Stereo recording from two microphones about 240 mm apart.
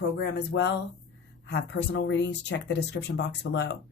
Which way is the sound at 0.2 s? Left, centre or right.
Left.